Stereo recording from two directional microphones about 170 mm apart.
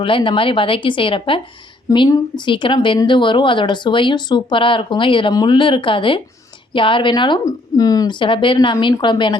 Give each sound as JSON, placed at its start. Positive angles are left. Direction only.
{"t": 0.0, "sound": "speech", "side_deg": 30}